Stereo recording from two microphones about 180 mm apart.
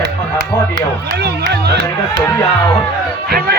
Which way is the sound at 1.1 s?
65° right (ahead or behind).